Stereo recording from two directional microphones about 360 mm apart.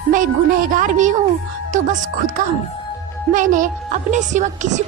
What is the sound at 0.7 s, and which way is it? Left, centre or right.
A woman's voice, right.